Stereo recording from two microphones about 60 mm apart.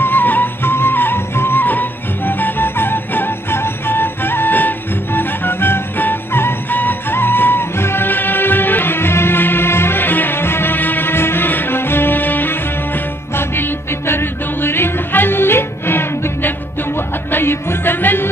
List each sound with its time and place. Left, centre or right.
0.0 s music: left